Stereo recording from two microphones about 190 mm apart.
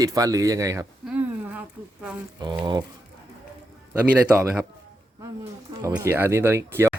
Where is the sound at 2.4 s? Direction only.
25° right (ahead or behind).